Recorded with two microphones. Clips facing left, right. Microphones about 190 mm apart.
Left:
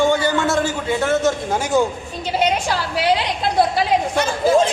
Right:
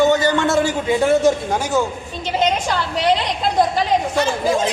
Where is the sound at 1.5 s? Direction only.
10° left (ahead or behind).